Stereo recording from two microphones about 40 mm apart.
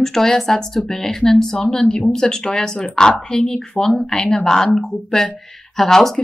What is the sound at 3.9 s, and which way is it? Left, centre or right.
Speech, centre.